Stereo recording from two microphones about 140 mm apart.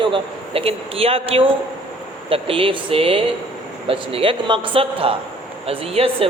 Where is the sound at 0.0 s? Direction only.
40° right (ahead or behind).